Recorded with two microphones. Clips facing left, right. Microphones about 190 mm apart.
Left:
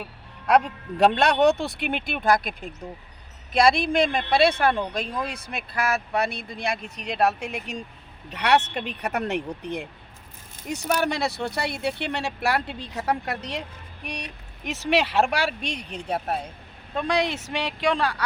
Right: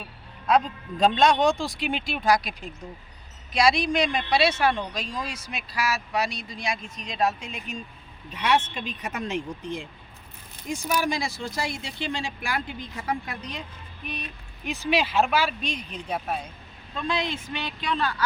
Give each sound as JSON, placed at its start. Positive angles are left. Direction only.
{"t": 0.4, "sound": "speech", "side_deg": 70}